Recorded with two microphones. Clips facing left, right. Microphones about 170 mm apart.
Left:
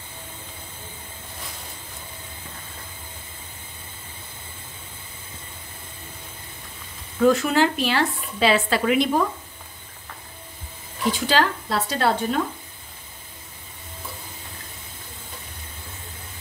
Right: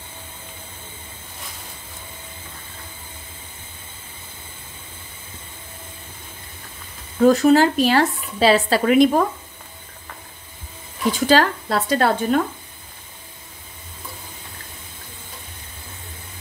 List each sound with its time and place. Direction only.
7.2 s a woman's voice: 40° right (ahead or behind)
11.2 s speech: 45° right (ahead or behind)